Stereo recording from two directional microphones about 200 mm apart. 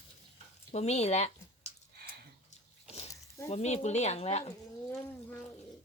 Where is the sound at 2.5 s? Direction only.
35° left (ahead or behind).